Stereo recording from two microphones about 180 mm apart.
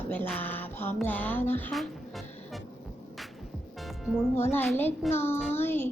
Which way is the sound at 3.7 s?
Centre (ahead or behind).